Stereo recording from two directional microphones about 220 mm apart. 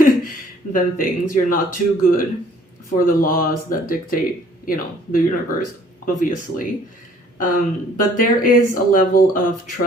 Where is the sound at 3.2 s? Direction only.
40° left (ahead or behind).